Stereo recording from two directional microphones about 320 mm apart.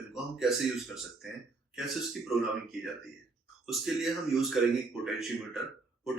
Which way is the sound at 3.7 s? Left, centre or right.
Centre.